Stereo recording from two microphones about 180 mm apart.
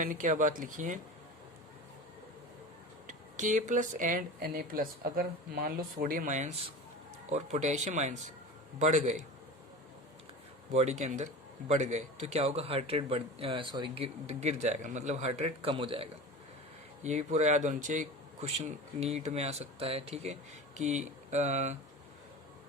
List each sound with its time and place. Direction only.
0.0 s speech: 45° right (ahead or behind)
3.1 s speech: 45° right (ahead or behind)
10.7 s speech: 35° right (ahead or behind)